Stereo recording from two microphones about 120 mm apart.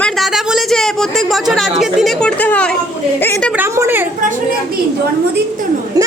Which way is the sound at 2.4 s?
10° left (ahead or behind).